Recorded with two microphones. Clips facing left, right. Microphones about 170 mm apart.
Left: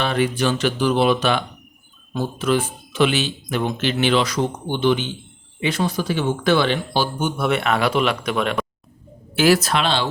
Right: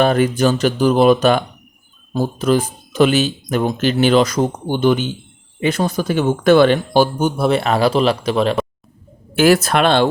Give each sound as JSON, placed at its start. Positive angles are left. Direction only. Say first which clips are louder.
{"t": 0.0, "sound": "speech", "louder": "right 6 dB", "side_deg": -45}
{"t": 9.3, "sound": "speech", "louder": "right 4 dB", "side_deg": -50}